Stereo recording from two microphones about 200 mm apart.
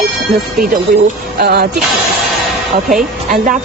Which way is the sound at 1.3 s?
55° right (ahead or behind).